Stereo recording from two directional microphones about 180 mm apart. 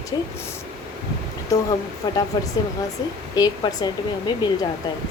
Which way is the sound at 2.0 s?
20° left (ahead or behind).